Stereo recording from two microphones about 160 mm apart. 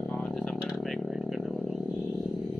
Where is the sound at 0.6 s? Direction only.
Centre (ahead or behind).